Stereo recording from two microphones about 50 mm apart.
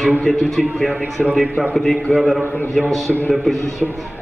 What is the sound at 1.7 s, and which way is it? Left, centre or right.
A man's voice, centre.